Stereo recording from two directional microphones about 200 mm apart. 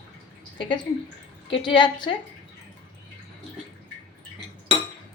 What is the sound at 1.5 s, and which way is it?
Speech, 25° left (ahead or behind).